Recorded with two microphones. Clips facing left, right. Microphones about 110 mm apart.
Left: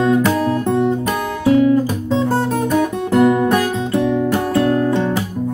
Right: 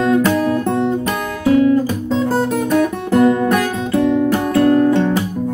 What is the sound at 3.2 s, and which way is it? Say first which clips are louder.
Music: even; 15° left (ahead or behind).